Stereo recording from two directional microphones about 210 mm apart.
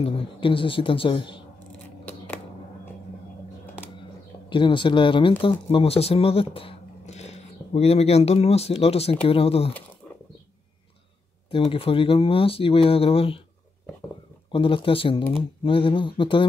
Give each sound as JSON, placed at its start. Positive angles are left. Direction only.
{"t": 0.0, "sound": "speech", "side_deg": 25}
{"t": 2.0, "sound": "a sound", "side_deg": 10}
{"t": 4.5, "sound": "speech", "side_deg": 25}
{"t": 11.5, "sound": "speech", "side_deg": 25}
{"t": 14.5, "sound": "speech", "side_deg": 25}